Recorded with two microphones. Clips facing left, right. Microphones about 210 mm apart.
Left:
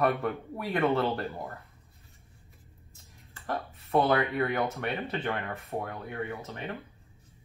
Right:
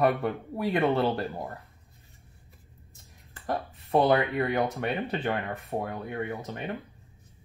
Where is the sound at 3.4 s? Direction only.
20° right (ahead or behind).